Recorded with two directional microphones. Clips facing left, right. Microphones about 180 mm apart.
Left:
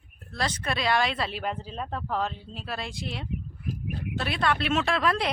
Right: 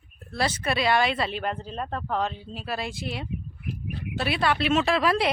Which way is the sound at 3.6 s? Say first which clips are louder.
Left 1 dB; 45° left (ahead or behind).